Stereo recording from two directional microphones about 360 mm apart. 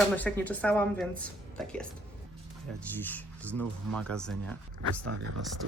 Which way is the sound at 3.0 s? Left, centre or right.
Centre.